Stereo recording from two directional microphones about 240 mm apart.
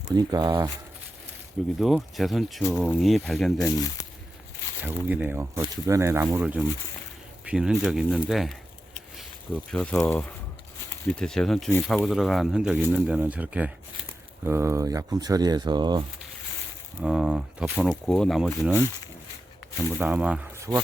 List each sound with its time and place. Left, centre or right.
0.1 s speech: centre
1.8 s speech: centre
4.0 s a sound: centre
4.8 s speech: centre
9.7 s speech: centre
17.0 s speech: centre
20.0 s speech: centre